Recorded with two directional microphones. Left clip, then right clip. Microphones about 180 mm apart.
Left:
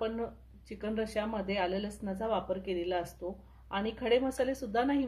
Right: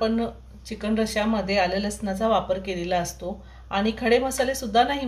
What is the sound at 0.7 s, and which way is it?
Speech, 45° left (ahead or behind).